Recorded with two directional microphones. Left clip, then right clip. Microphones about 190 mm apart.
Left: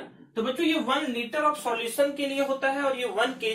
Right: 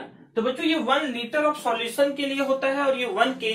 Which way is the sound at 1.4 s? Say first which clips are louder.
Right 1 dB; 15° right (ahead or behind).